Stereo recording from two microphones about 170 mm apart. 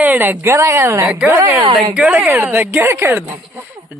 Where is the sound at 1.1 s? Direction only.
5° right (ahead or behind).